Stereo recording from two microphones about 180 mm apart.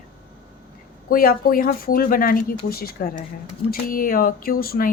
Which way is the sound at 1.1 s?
55° left (ahead or behind).